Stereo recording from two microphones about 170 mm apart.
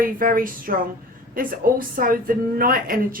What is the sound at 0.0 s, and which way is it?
A woman's voice, 55° right (ahead or behind).